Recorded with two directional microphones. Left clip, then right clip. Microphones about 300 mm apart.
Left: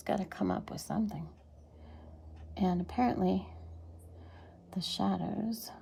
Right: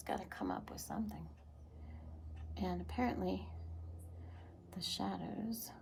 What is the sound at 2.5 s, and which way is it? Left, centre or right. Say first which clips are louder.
Speech: left 8 dB; left.